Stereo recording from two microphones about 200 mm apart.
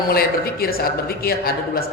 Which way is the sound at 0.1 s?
50° left (ahead or behind).